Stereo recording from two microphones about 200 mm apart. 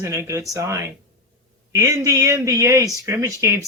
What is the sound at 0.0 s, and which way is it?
Speech, 15° right (ahead or behind).